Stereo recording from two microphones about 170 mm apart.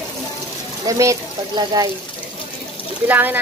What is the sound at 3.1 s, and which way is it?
Speech, 10° right (ahead or behind).